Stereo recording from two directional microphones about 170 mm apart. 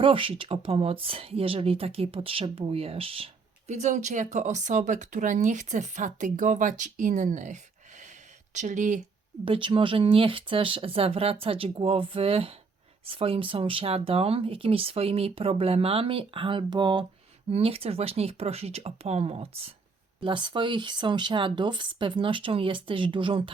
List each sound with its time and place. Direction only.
0.0 s speech: 30° right (ahead or behind)
9.4 s speech: 30° right (ahead or behind)